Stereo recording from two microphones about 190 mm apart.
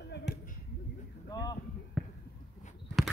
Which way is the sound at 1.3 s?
20° left (ahead or behind).